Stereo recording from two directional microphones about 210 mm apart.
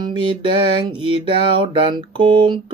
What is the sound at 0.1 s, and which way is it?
Music, 25° right (ahead or behind).